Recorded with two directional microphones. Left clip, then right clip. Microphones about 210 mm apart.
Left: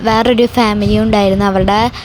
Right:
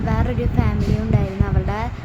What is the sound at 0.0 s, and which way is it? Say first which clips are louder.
A woman's voice: left 14 dB; 40° left (ahead or behind).